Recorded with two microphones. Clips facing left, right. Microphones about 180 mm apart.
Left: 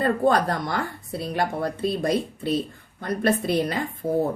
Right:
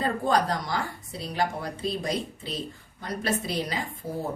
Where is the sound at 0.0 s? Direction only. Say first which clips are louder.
Left 4 dB; 55° left (ahead or behind).